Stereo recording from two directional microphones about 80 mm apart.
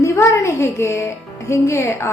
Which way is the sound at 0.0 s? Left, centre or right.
Left.